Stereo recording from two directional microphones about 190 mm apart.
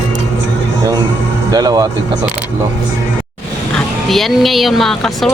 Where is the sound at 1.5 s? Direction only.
20° right (ahead or behind).